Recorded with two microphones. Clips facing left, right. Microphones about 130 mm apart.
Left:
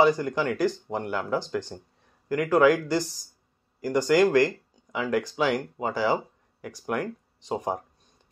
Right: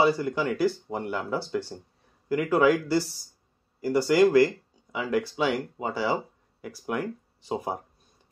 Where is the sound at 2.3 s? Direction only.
5° right (ahead or behind).